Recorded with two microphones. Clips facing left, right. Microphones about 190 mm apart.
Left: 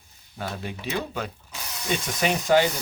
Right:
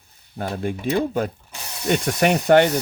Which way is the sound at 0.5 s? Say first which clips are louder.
Right 9 dB; 50° right (ahead or behind).